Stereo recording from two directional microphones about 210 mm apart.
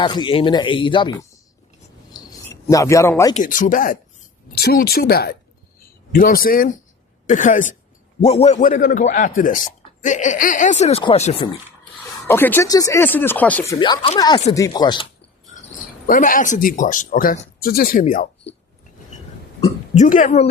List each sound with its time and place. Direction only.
0.0 s speech: 20° left (ahead or behind)
2.1 s a sound: 15° left (ahead or behind)
3.3 s speech: 40° left (ahead or behind)
12.3 s speech: 10° left (ahead or behind)
13.7 s speech: 20° left (ahead or behind)
16.0 s speech: 40° left (ahead or behind)
20.0 s speech: 35° left (ahead or behind)